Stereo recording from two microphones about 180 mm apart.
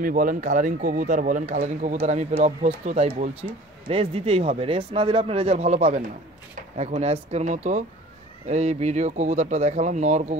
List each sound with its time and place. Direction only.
0.0 s speech: 50° right (ahead or behind)
3.4 s speech: 30° right (ahead or behind)